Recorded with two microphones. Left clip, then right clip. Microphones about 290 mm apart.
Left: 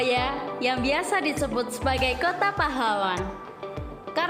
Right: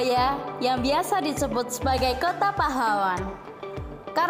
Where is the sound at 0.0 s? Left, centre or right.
Centre.